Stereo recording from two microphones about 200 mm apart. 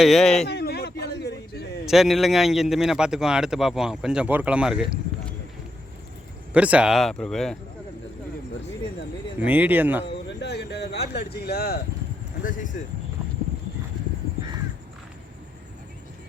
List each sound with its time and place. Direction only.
0.0 s speech: centre (ahead or behind)
0.4 s a sound: 55° left (ahead or behind)
1.9 s speech: centre (ahead or behind)
6.5 s speech: 5° right (ahead or behind)
9.4 s speech: 10° right (ahead or behind)
10.2 s speech: 55° left (ahead or behind); by 12.7 s 40° left (ahead or behind)